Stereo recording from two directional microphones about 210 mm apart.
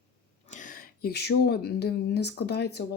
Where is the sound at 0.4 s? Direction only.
35° left (ahead or behind).